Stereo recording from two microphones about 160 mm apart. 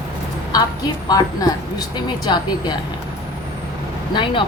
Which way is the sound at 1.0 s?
25° left (ahead or behind).